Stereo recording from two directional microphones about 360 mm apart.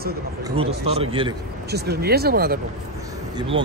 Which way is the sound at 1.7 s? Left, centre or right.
Right.